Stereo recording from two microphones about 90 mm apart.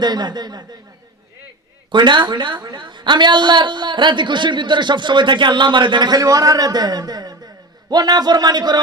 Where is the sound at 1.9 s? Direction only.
60° right (ahead or behind).